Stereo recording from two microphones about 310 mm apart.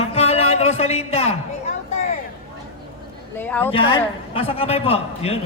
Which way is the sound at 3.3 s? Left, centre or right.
Centre.